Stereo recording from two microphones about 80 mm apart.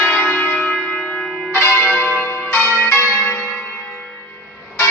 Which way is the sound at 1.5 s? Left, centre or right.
Left.